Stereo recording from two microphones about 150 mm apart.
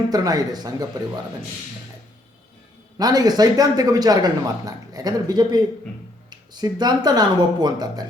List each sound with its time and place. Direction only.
0.1 s speech: 25° right (ahead or behind)
3.0 s speech: 25° right (ahead or behind)